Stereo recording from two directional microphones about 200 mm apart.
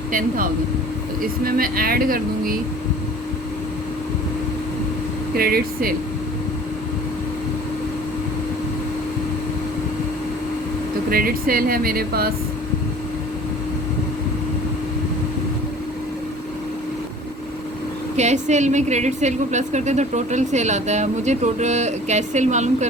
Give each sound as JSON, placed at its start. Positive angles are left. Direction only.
{"t": 0.1, "sound": "speech", "side_deg": -45}
{"t": 5.3, "sound": "speech", "side_deg": -50}
{"t": 11.1, "sound": "speech", "side_deg": -45}
{"t": 18.2, "sound": "speech", "side_deg": -35}